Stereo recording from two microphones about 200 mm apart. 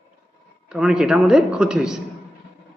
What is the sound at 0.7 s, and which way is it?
A man's voice, 5° right (ahead or behind).